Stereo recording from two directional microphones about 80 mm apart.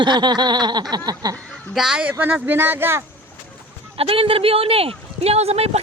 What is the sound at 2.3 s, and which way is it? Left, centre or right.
Speech, right.